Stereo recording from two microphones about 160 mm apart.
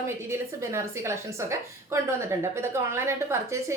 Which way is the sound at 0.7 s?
15° right (ahead or behind).